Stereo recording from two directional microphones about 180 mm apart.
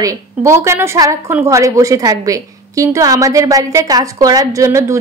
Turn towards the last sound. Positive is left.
turn(degrees=-15)  # may be behind; listen again after turning